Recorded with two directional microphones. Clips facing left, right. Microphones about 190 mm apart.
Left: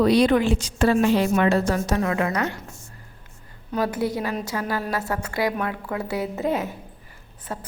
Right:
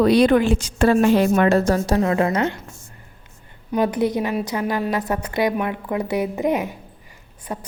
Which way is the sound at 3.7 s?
20° right (ahead or behind).